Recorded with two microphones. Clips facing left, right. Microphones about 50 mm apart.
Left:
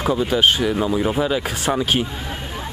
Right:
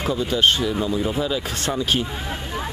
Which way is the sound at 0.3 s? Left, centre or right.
Centre.